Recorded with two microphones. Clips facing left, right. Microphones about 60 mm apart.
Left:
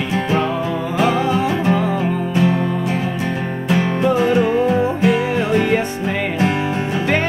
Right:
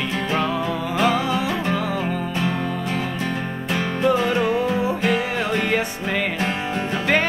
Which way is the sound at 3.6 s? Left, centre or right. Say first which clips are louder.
Left 4 dB; centre.